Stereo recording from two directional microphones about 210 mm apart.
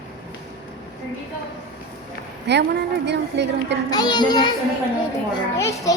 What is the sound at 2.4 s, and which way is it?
A woman's voice, 55° right (ahead or behind).